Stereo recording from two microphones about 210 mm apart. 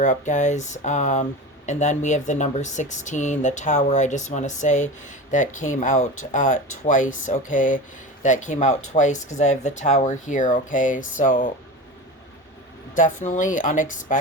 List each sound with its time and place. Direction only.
0.0 s speech: 35° left (ahead or behind)
13.0 s speech: 35° left (ahead or behind)